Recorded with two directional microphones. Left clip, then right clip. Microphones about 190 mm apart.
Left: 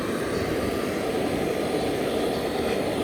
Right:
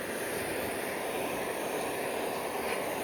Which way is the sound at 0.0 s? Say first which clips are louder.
Left 7 dB; 5° right (ahead or behind).